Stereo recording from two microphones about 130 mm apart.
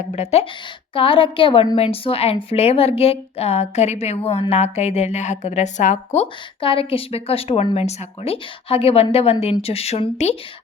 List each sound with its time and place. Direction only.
0.1 s a woman's voice: 55° left (ahead or behind)
0.9 s a woman's voice: 45° left (ahead or behind); by 6.2 s 65° left (ahead or behind)
6.6 s speech: 45° left (ahead or behind)